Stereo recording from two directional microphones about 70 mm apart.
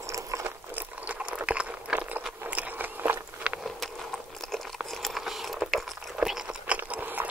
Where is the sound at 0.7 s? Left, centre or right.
Right.